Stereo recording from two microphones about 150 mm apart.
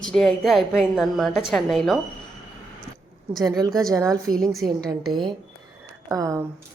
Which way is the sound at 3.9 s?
20° right (ahead or behind).